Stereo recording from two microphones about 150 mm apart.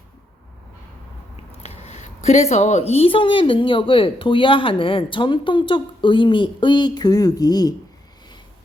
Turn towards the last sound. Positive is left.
turn(degrees=25)  # may be behind; listen again after turning